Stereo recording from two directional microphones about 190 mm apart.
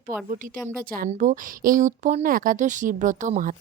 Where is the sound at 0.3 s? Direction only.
45° right (ahead or behind).